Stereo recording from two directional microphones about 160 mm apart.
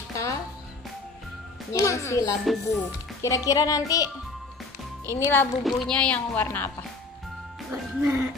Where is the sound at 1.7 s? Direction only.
20° left (ahead or behind).